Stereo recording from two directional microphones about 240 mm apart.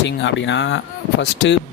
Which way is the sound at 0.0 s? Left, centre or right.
Left.